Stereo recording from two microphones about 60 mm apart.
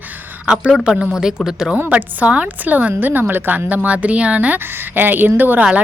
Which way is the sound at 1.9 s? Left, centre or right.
Right.